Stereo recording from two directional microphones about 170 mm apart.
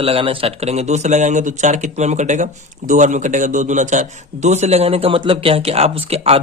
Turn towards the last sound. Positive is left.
turn(degrees=-35)  # may be behind; listen again after turning